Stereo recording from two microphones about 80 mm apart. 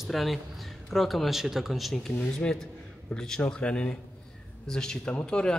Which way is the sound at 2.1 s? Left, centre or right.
Centre.